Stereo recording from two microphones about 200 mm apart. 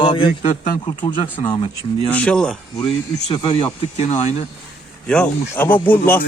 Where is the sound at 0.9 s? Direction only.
25° left (ahead or behind).